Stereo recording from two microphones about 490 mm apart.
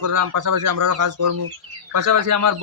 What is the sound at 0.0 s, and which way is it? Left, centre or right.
A man's voice, right.